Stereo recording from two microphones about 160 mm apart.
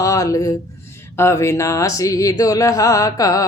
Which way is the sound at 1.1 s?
15° left (ahead or behind).